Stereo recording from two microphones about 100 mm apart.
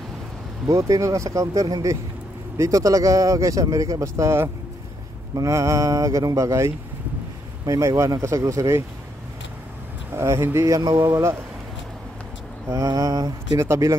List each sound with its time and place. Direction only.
0.7 s speech: 35° right (ahead or behind)
10.1 s speech: 25° right (ahead or behind)
12.6 s speech: 30° right (ahead or behind)